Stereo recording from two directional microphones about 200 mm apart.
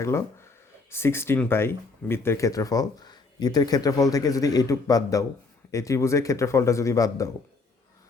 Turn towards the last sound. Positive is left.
turn(degrees=15)  # may be behind; listen again after turning